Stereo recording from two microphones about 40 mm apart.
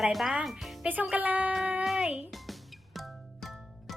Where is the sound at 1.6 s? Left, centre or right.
Right.